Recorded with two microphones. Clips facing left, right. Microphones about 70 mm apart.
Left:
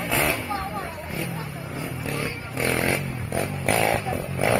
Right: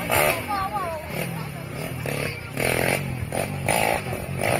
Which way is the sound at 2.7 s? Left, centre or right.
Centre.